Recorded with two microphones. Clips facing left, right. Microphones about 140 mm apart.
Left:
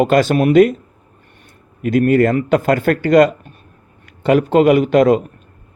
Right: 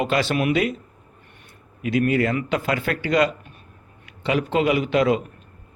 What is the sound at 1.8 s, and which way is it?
A man's voice, 50° left (ahead or behind).